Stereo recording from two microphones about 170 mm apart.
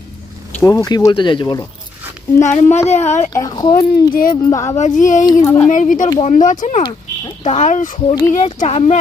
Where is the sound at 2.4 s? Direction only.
45° left (ahead or behind).